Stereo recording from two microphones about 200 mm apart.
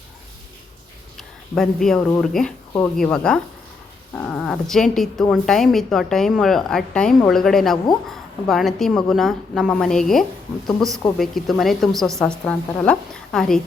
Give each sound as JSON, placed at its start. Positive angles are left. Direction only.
{"t": 1.1, "sound": "a woman's voice", "side_deg": 0}